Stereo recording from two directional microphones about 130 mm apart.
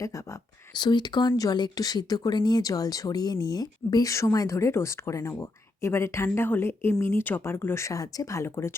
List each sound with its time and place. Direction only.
0.8 s speech: 35° left (ahead or behind)